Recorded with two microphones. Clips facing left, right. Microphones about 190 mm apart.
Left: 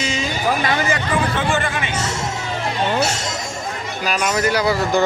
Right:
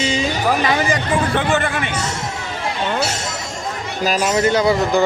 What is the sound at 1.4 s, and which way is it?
Speech, 60° right (ahead or behind).